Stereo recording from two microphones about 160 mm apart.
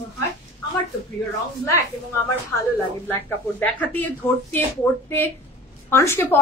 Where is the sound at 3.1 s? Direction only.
15° left (ahead or behind).